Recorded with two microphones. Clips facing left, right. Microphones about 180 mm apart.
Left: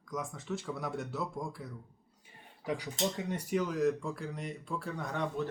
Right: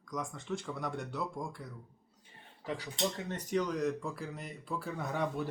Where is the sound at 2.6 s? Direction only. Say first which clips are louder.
Left 2 dB; 15° left (ahead or behind); by 5.2 s 5° right (ahead or behind).